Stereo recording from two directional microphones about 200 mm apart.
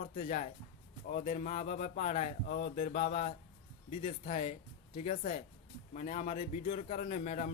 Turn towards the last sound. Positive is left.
turn(degrees=35)  # may be behind; listen again after turning